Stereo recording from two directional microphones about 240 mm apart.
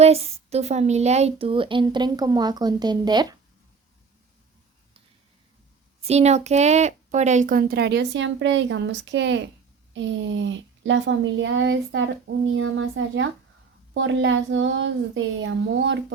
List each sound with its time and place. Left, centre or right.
0.0 s speech: right
6.1 s speech: right